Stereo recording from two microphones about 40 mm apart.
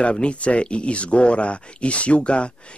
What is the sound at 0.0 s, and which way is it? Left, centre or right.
Speech, left.